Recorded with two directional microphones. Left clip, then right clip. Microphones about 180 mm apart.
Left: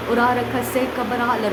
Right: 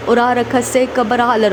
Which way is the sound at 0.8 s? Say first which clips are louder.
Right 8 dB; 40° right (ahead or behind).